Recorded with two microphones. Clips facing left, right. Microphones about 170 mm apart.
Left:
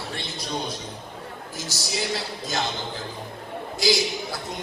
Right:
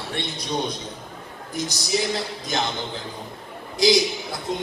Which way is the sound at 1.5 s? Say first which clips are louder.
Right 9 dB; 20° right (ahead or behind).